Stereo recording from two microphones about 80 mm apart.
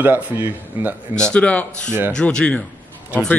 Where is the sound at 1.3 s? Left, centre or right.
Centre.